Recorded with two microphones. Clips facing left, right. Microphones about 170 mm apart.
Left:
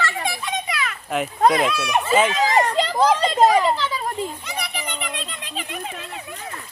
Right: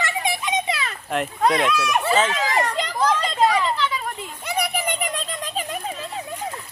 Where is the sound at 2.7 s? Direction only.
25° left (ahead or behind).